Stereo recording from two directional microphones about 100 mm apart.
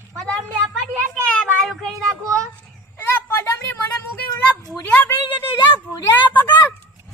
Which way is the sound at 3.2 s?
20° left (ahead or behind).